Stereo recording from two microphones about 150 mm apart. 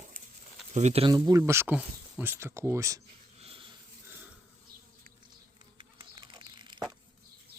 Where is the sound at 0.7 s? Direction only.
45° right (ahead or behind).